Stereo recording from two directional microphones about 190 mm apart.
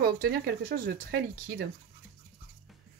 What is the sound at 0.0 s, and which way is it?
Speech, 55° right (ahead or behind).